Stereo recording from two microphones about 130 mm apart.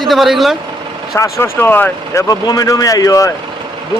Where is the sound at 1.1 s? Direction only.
20° left (ahead or behind).